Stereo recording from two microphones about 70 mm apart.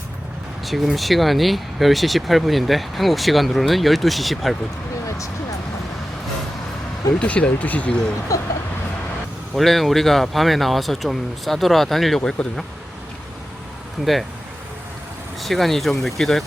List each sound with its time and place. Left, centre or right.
0.6 s speech: centre
5.0 s a sound: left
7.2 s speech: centre
8.3 s speech: left
9.6 s speech: centre
14.0 s speech: centre
15.4 s speech: centre